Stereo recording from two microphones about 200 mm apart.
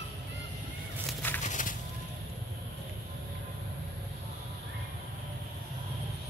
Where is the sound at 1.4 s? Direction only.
40° left (ahead or behind).